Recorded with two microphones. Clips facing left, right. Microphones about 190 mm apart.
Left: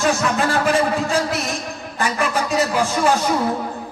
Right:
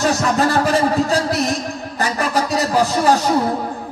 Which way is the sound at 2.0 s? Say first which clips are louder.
Right 1 dB; 40° right (ahead or behind).